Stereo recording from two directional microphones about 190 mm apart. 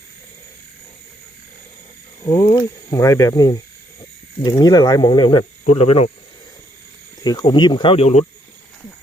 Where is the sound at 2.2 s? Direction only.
20° left (ahead or behind); by 6.1 s 35° left (ahead or behind).